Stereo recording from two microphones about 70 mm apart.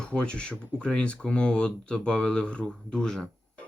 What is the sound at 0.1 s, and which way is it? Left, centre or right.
Speech, centre.